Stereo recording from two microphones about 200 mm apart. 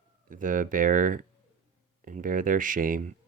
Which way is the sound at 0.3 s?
40° right (ahead or behind).